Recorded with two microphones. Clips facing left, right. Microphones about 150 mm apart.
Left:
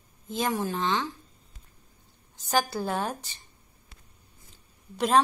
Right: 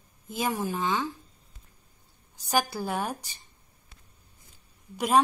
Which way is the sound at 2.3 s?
10° right (ahead or behind).